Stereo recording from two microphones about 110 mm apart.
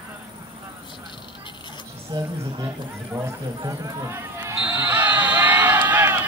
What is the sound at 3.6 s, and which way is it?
Basketball bounce, 25° right (ahead or behind).